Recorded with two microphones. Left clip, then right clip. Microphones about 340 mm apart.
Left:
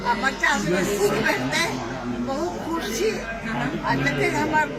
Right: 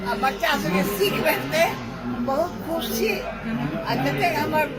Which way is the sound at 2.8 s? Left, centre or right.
Centre.